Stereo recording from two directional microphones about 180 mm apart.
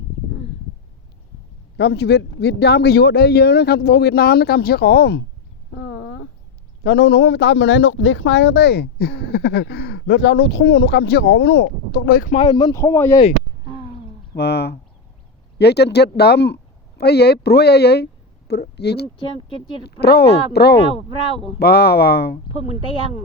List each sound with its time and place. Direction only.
1.7 s speech: 70° left (ahead or behind)
5.7 s a sound: 90° left
6.8 s a man's voice: 70° left (ahead or behind)
12.4 s a man's voice: 20° left (ahead or behind)
14.3 s a man's voice: 65° left (ahead or behind)
20.7 s speech: 35° left (ahead or behind)
21.6 s speech: 65° left (ahead or behind)
22.5 s speech: 35° left (ahead or behind)